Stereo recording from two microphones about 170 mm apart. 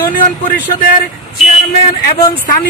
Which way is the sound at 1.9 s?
55° left (ahead or behind).